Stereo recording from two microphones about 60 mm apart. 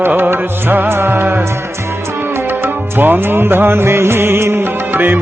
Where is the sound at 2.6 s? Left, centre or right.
Right.